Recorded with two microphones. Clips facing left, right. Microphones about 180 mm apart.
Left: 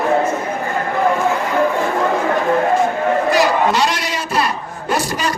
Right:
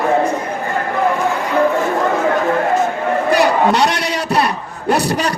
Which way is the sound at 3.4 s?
65° right (ahead or behind).